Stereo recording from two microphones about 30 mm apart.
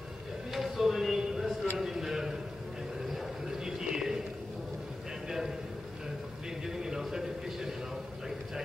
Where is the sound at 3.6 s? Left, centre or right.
Centre.